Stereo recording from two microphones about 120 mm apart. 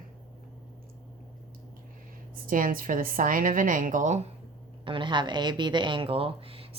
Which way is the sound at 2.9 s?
90° right.